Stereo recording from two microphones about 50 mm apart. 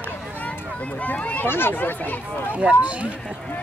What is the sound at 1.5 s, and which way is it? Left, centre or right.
Speech, left.